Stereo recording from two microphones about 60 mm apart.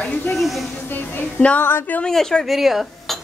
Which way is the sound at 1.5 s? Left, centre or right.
Left.